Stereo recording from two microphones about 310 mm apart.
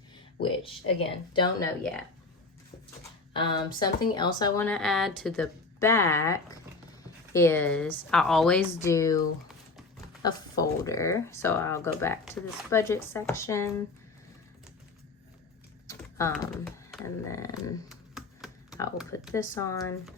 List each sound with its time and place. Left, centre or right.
0.4 s speech: centre
3.3 s a woman's voice: centre
10.2 s speech: centre
15.9 s speech: centre
17.8 s typing: centre
19.3 s speech: centre